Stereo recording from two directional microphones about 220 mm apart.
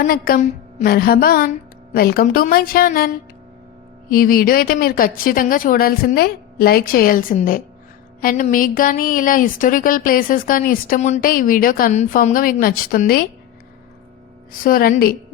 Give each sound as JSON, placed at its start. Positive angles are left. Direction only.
{"t": 0.0, "sound": "music", "side_deg": 40}
{"t": 4.1, "sound": "speech", "side_deg": 40}
{"t": 14.6, "sound": "speech", "side_deg": 40}